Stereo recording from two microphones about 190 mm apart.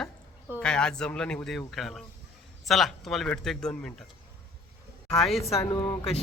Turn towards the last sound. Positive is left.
turn(degrees=20)  # may be behind; listen again after turning